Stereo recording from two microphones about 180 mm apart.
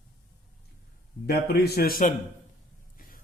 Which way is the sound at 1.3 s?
60° left (ahead or behind).